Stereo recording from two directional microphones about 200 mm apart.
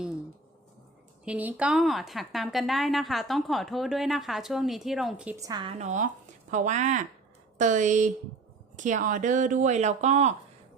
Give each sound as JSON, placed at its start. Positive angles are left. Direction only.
{"t": 1.2, "sound": "a woman's voice", "side_deg": -5}
{"t": 5.4, "sound": "a woman's voice", "side_deg": -20}
{"t": 5.8, "sound": "speech", "side_deg": -35}